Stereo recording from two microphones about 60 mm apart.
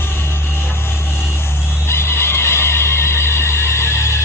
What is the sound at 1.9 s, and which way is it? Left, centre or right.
Neigh, left.